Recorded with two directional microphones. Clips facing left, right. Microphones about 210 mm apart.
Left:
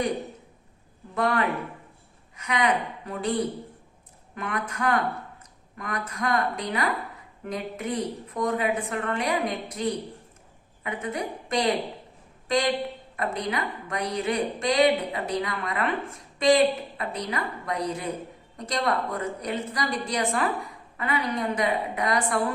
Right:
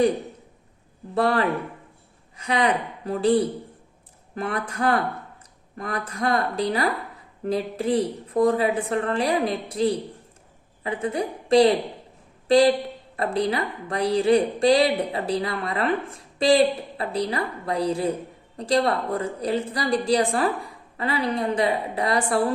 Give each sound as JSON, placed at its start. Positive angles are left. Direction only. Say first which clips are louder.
{"t": 1.1, "sound": "a woman's voice", "louder": "right 4 dB", "side_deg": -30}